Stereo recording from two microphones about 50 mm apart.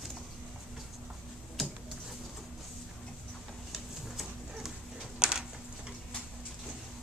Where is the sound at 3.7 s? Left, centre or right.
Centre.